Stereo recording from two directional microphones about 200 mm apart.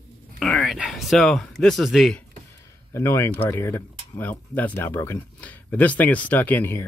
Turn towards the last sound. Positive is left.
turn(degrees=10)  # may be behind; listen again after turning